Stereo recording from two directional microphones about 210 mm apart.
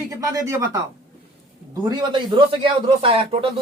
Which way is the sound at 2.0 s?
25° right (ahead or behind).